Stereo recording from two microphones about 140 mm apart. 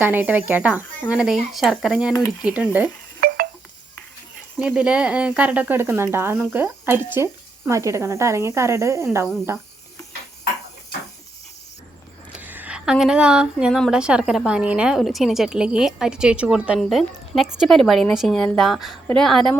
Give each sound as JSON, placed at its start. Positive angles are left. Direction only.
{"t": 0.0, "sound": "speech", "side_deg": -15}
{"t": 3.2, "sound": "a sound", "side_deg": -90}
{"t": 4.6, "sound": "speech", "side_deg": -5}
{"t": 12.3, "sound": "speech", "side_deg": -10}